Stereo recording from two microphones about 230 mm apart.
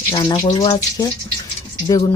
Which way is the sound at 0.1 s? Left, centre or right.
Centre.